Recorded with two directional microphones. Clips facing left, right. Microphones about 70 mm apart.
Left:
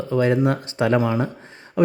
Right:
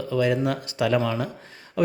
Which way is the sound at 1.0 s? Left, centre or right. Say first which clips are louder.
Left 4 dB; centre.